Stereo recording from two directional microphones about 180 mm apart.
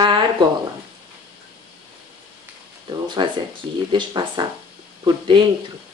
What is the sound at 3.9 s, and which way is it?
Speech, 25° right (ahead or behind).